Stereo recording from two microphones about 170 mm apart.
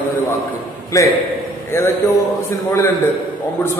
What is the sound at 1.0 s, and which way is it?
Speech, 20° left (ahead or behind).